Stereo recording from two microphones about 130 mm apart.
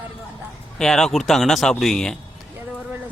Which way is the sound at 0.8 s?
5° left (ahead or behind).